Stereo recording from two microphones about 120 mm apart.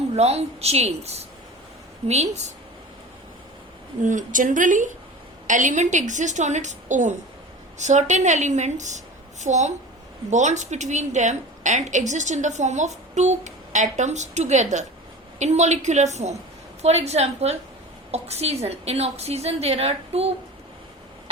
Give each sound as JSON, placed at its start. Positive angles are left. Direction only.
{"t": 0.2, "sound": "a woman's voice", "side_deg": -60}
{"t": 4.0, "sound": "a woman's voice", "side_deg": -90}
{"t": 7.8, "sound": "a woman's voice", "side_deg": -80}
{"t": 15.4, "sound": "a woman's voice", "side_deg": -70}